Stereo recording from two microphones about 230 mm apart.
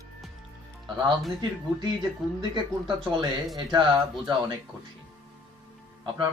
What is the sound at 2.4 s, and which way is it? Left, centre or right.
Speech, centre.